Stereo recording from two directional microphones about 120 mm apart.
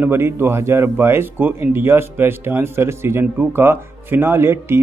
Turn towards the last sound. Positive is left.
turn(degrees=-20)  # may be behind; listen again after turning